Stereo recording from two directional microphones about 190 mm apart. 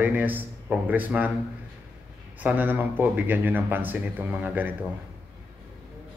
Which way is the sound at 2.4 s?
10° right (ahead or behind).